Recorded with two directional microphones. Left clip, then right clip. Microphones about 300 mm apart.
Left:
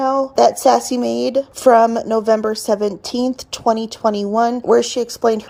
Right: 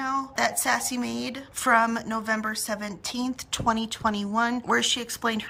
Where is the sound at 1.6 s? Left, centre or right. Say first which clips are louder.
Left 10 dB; centre.